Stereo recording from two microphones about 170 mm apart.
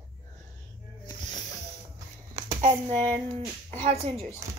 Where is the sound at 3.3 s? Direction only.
35° right (ahead or behind).